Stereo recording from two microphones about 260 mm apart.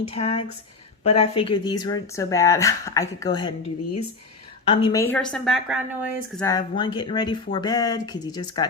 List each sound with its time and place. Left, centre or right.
0.1 s speech: left
4.7 s a woman's voice: centre
6.4 s speech: centre